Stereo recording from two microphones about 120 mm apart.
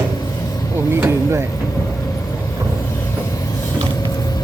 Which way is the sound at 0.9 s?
20° right (ahead or behind).